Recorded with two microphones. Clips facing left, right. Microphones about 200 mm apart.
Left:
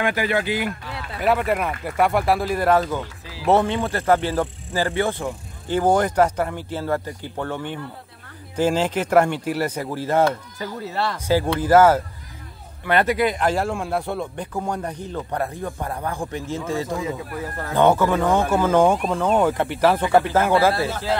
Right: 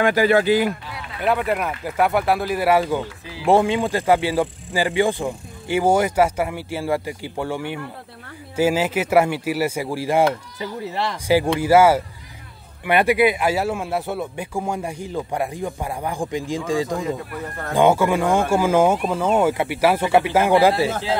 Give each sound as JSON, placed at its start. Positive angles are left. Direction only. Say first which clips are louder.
{"t": 0.0, "sound": "speech", "louder": "right 6 dB", "side_deg": -40}
{"t": 1.2, "sound": "speech", "louder": "even", "side_deg": 0}